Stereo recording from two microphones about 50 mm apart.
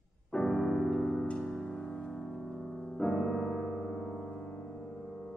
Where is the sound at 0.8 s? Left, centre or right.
Centre.